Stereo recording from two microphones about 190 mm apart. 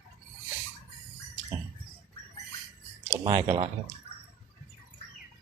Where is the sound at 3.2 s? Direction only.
25° right (ahead or behind).